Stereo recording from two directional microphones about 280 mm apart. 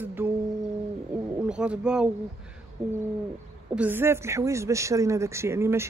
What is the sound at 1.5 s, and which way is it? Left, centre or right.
Speech, centre.